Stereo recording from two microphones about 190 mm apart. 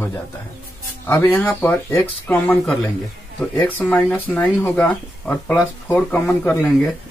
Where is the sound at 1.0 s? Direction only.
10° left (ahead or behind).